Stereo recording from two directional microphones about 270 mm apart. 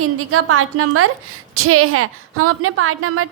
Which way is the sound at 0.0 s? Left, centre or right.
Right.